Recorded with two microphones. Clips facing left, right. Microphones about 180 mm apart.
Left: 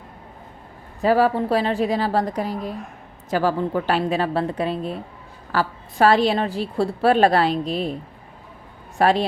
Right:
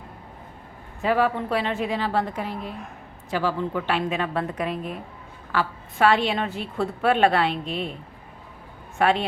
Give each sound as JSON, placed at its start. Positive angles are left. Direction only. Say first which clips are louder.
{"t": 1.0, "sound": "a woman's voice", "louder": "left 4 dB", "side_deg": 35}
{"t": 9.0, "sound": "a woman's voice", "louder": "left 3 dB", "side_deg": 35}